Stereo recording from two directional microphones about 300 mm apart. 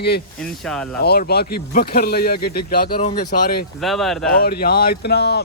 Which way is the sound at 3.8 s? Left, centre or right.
Centre.